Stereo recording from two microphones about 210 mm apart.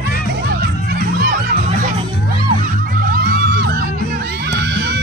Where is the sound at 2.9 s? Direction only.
45° right (ahead or behind).